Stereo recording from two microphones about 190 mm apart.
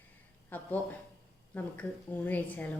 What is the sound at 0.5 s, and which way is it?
A woman's voice, 10° left (ahead or behind).